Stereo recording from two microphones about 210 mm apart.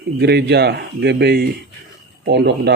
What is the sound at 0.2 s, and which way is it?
Speech, 50° right (ahead or behind).